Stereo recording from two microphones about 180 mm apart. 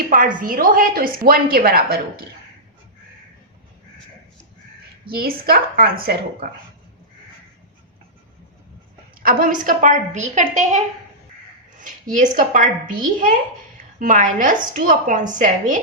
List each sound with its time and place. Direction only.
0.1 s a woman's voice: 50° right (ahead or behind)
5.0 s a woman's voice: 55° right (ahead or behind)
9.2 s a woman's voice: 50° right (ahead or behind)